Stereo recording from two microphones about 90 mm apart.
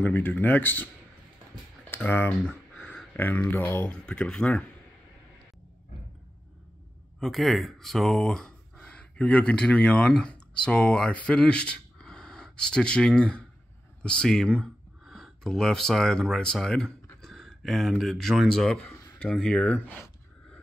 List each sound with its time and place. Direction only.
0.0 s speech: 20° left (ahead or behind)
1.9 s speech: 20° left (ahead or behind)
2.4 s a sound: 10° right (ahead or behind)
3.2 s speech: 20° left (ahead or behind)
3.9 s speech: 10° left (ahead or behind)
7.2 s speech: centre (ahead or behind)